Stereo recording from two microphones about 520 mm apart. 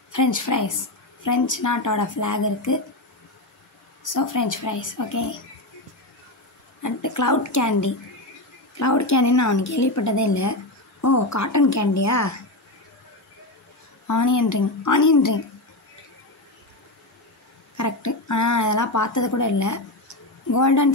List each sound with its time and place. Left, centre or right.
0.1 s speech: left
4.0 s speech: left
6.8 s speech: left
14.0 s speech: left
17.7 s speech: left